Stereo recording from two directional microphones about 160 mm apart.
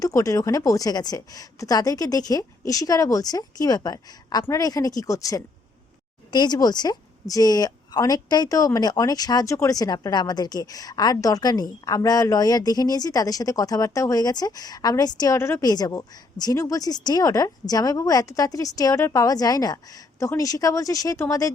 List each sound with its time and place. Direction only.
0.0 s a woman's voice: 20° left (ahead or behind)